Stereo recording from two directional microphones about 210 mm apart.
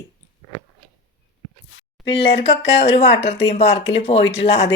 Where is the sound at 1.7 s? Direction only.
60° left (ahead or behind).